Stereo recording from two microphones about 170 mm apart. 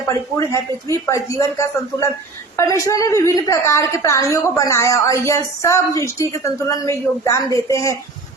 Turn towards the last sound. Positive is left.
turn(degrees=20)  # may be behind; listen again after turning